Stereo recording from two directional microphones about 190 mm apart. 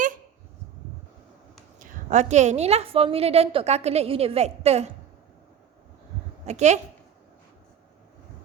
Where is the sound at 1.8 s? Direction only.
40° right (ahead or behind).